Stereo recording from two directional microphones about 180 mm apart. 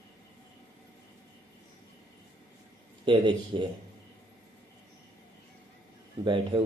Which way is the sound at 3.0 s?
30° right (ahead or behind).